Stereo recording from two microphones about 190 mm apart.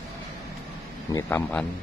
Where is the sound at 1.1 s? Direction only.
10° left (ahead or behind).